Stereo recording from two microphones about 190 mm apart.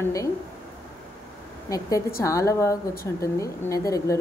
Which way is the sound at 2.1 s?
15° left (ahead or behind).